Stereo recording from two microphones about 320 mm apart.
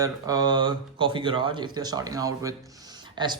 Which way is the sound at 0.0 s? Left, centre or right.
Centre.